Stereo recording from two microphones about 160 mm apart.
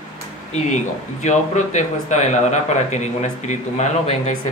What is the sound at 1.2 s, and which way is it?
A man's voice, 50° left (ahead or behind).